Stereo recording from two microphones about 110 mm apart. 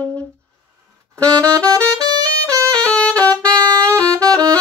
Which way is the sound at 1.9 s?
35° right (ahead or behind).